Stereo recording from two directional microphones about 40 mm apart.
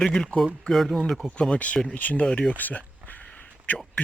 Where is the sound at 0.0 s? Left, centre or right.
Centre.